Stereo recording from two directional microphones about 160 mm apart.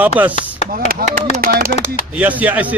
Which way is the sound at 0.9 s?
65° right (ahead or behind).